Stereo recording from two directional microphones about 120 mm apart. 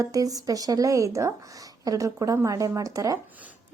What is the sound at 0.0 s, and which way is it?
A woman's voice, 30° right (ahead or behind).